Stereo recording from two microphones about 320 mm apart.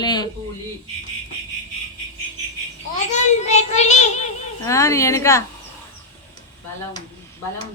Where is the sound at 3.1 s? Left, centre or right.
Left.